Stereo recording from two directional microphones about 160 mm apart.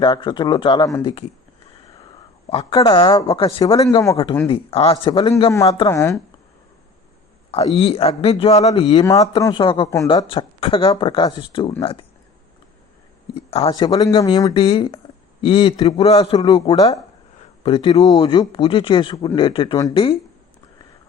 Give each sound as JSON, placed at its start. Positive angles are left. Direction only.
{"t": 0.0, "sound": "speech", "side_deg": 30}
{"t": 2.5, "sound": "speech", "side_deg": 35}
{"t": 4.4, "sound": "speech", "side_deg": 35}
{"t": 5.5, "sound": "speech", "side_deg": 20}
{"t": 7.5, "sound": "speech", "side_deg": 35}
{"t": 8.9, "sound": "speech", "side_deg": 25}
{"t": 13.5, "sound": "a man's voice", "side_deg": 40}
{"t": 13.7, "sound": "speech", "side_deg": 25}
{"t": 17.6, "sound": "speech", "side_deg": 35}